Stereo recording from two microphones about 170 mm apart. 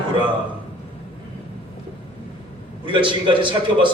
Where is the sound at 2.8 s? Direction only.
30° right (ahead or behind).